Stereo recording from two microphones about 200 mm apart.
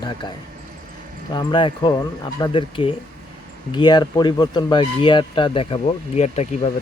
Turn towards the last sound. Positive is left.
turn(degrees=35)  # may be behind; listen again after turning